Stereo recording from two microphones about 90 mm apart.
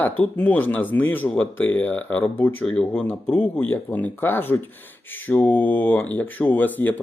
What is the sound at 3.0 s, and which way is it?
Speech, 20° left (ahead or behind).